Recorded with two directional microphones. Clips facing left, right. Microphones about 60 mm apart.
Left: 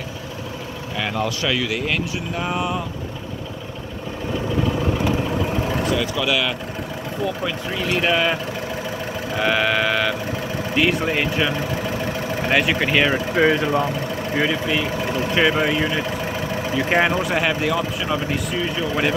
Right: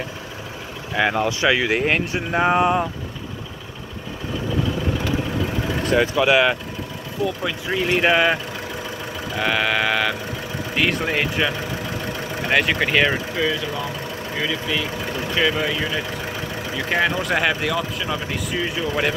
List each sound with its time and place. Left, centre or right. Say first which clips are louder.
0.9 s speech: right 4 dB; centre; by 2.9 s right
6.1 s speech: right 5 dB; right
7.7 s speech: right 3 dB; centre
9.4 s speech: left 1 dB; centre
13.4 s speech: left 9 dB; left
14.3 s speech: left 3 dB; centre
17.2 s speech: even; centre